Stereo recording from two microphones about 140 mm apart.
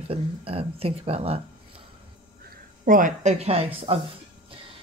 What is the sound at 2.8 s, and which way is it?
Speech, 75° right (ahead or behind).